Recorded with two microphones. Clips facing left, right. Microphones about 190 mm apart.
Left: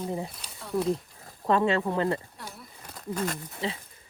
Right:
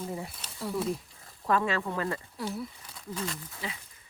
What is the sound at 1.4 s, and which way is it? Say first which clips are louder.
Speech: left 4 dB; 25° left (ahead or behind).